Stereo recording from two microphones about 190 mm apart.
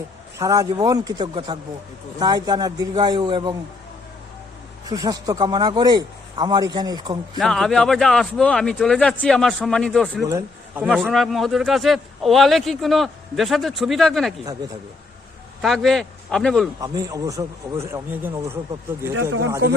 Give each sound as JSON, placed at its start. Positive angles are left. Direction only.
{"t": 0.3, "sound": "a man's voice", "side_deg": -20}
{"t": 4.9, "sound": "a man's voice", "side_deg": -20}
{"t": 7.3, "sound": "speech", "side_deg": 0}
{"t": 10.2, "sound": "speech", "side_deg": -15}
{"t": 15.6, "sound": "speech", "side_deg": 0}
{"t": 16.8, "sound": "a man's voice", "side_deg": -20}